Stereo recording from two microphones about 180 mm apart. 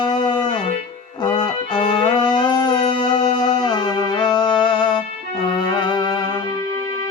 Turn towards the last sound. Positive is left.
turn(degrees=25)  # may be behind; listen again after turning